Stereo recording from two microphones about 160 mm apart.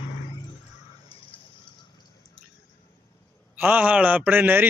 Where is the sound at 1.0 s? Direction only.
30° left (ahead or behind).